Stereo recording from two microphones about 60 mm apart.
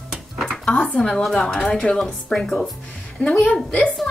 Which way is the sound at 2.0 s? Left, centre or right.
Centre.